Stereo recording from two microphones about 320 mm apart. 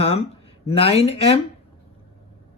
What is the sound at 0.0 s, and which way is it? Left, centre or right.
Speech, centre.